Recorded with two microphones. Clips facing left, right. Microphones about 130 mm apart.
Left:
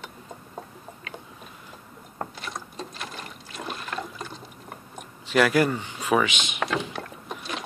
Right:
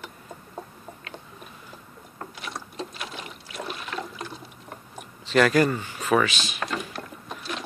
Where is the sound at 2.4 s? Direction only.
5° right (ahead or behind).